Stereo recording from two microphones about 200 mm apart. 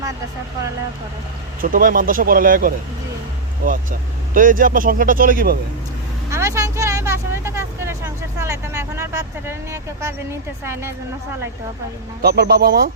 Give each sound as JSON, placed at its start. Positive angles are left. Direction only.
{"t": 1.6, "sound": "speech", "side_deg": -45}
{"t": 4.4, "sound": "speech", "side_deg": -45}
{"t": 6.3, "sound": "speech", "side_deg": -15}
{"t": 12.2, "sound": "speech", "side_deg": -50}